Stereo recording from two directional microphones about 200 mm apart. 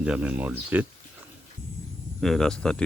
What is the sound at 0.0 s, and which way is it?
Speech, 5° right (ahead or behind).